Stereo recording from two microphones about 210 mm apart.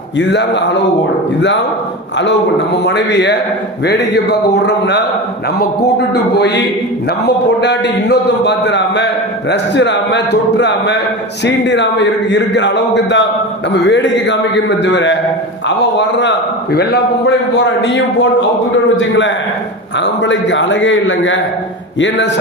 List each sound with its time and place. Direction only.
0.2 s a man's voice: 55° left (ahead or behind)
2.7 s a man's voice: 55° left (ahead or behind)
3.8 s mantra: 55° left (ahead or behind)
6.3 s mantra: 50° left (ahead or behind)
7.3 s a man's voice: 55° left (ahead or behind)
16.7 s mantra: 50° left (ahead or behind)
17.8 s a man's voice: 55° left (ahead or behind)